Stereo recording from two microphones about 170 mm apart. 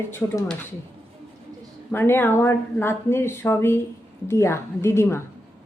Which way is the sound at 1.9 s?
10° left (ahead or behind).